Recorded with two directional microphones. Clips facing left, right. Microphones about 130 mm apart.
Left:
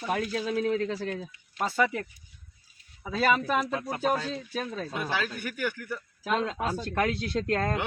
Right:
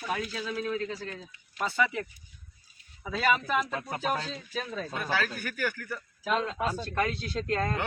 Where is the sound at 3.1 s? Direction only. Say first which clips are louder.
Left 2 dB; 35° left (ahead or behind).